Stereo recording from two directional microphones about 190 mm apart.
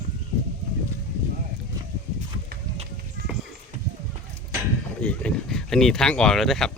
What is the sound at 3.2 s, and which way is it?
Music, 55° right (ahead or behind).